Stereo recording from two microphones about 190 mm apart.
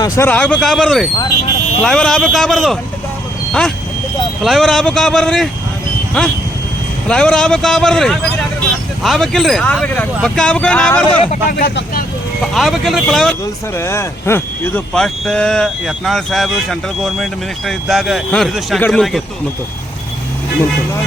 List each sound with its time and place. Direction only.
0.0 s speech: 10° left (ahead or behind)
4.4 s speech: centre (ahead or behind)
11.4 s speech: 50° left (ahead or behind)
12.5 s speech: centre (ahead or behind)
13.7 s speech: 15° left (ahead or behind)